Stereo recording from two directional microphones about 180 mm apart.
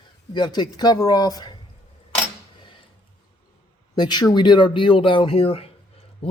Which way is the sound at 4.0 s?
25° left (ahead or behind).